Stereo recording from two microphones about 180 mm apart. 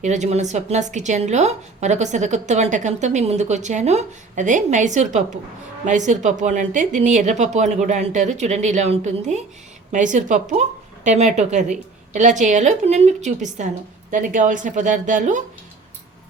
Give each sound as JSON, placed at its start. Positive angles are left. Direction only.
{"t": 0.0, "sound": "a woman's voice", "side_deg": -40}